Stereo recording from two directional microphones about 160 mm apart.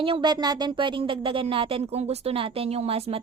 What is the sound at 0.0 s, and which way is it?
A woman's voice, 30° right (ahead or behind).